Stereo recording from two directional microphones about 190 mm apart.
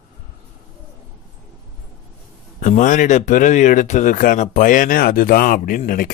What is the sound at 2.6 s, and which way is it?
Speech, 40° left (ahead or behind).